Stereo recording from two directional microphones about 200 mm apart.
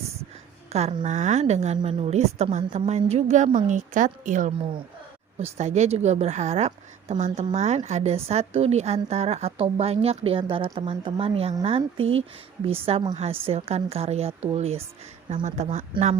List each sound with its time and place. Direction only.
0.7 s a woman's voice: 35° right (ahead or behind)